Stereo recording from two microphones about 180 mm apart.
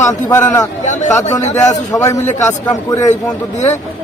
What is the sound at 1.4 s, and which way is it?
Speech, 40° left (ahead or behind).